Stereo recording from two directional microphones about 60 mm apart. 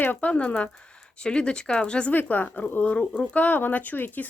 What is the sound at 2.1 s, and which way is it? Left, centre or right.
Speech, left.